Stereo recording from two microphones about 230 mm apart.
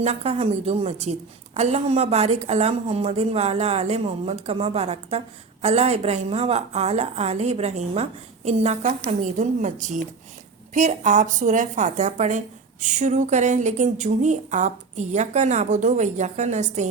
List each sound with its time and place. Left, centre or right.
0.0 s a woman's voice: right